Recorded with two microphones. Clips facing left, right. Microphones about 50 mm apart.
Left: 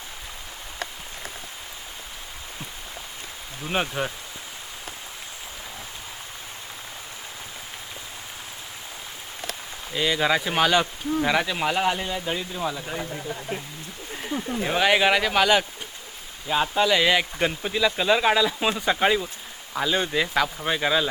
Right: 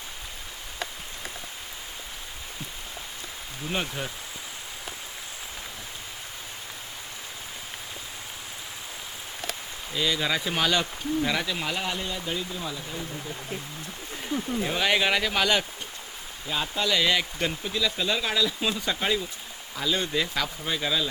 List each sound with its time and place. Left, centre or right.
3.7 s speech: left
9.9 s speech: left
14.3 s speech: centre
16.5 s speech: left
20.6 s speech: left